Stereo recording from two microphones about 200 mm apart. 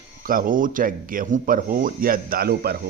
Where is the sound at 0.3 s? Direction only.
45° right (ahead or behind).